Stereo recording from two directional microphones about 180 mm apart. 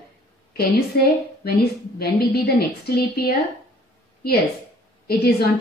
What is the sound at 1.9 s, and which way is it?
Speech, 60° left (ahead or behind).